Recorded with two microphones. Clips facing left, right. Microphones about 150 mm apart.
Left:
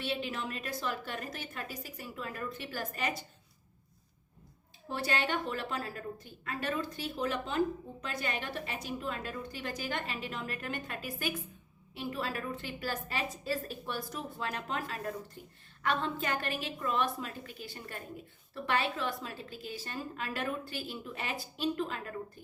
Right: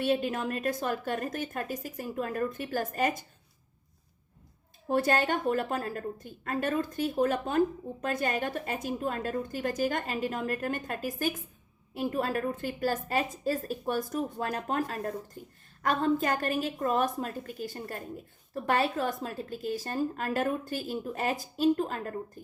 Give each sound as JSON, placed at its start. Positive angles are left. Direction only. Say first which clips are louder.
{"t": 0.0, "sound": "a woman's voice", "louder": "right 8 dB", "side_deg": -45}
{"t": 4.9, "sound": "a woman's voice", "louder": "right 7 dB", "side_deg": -50}